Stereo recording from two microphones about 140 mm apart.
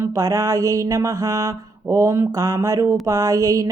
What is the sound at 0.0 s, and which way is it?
Mantra, 25° right (ahead or behind).